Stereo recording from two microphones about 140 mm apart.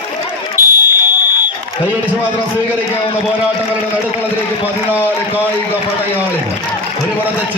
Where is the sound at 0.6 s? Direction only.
15° right (ahead or behind).